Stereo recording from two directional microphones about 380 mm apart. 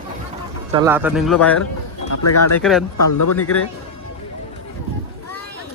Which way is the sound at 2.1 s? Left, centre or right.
Left.